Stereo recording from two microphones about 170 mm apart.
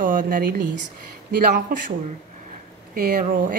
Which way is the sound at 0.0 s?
55° right (ahead or behind).